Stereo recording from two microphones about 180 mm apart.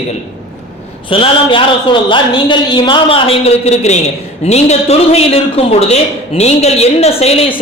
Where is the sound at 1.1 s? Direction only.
30° left (ahead or behind).